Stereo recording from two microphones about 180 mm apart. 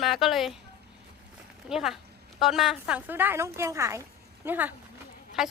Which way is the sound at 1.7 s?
Centre (ahead or behind).